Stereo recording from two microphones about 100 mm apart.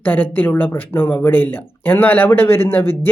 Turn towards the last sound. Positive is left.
turn(degrees=20)  # may be behind; listen again after turning